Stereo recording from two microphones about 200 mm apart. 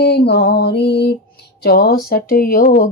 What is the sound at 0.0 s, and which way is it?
Mantra, 55° left (ahead or behind).